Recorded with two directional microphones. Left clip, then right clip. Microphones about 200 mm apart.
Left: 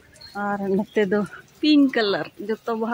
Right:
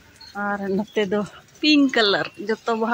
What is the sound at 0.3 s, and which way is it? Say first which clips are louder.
Speech: even; 5° left (ahead or behind).